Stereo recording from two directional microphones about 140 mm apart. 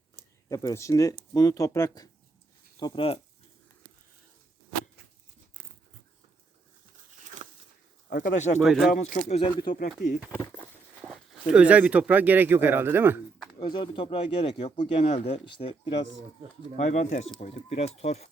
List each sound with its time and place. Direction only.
0.4 s speech: 25° left (ahead or behind)
2.7 s speech: 35° left (ahead or behind)
7.4 s a sound: 55° right (ahead or behind)
8.1 s speech: 65° left (ahead or behind)
8.6 s speech: centre (ahead or behind)
9.0 s speech: 60° left (ahead or behind)
9.4 s speech: 35° left (ahead or behind)
10.3 s walk: 15° left (ahead or behind)
11.0 s speech: 5° right (ahead or behind)
13.6 s speech: 35° left (ahead or behind)
15.4 s speech: 35° left (ahead or behind)
16.7 s speech: 55° left (ahead or behind)